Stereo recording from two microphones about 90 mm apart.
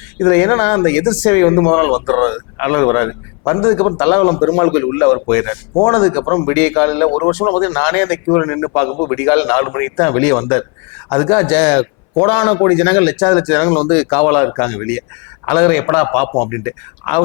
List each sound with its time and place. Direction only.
0.2 s speech: 20° left (ahead or behind)